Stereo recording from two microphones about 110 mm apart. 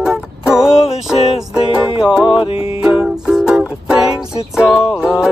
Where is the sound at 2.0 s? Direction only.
5° right (ahead or behind).